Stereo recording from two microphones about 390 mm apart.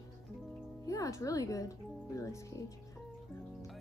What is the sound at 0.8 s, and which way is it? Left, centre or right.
Speech, centre.